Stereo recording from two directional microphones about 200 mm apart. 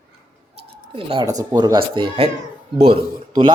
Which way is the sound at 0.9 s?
25° right (ahead or behind).